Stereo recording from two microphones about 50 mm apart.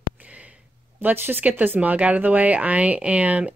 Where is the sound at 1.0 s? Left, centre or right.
Right.